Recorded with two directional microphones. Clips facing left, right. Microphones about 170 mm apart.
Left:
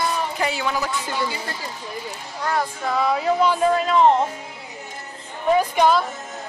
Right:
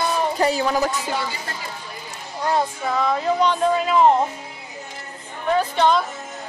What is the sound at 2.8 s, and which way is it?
Speech, 5° left (ahead or behind).